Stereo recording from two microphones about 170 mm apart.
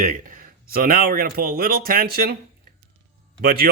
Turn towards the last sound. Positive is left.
turn(degrees=-65)  # may be behind; listen again after turning